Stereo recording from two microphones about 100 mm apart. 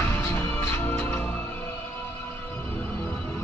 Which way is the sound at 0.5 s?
15° left (ahead or behind).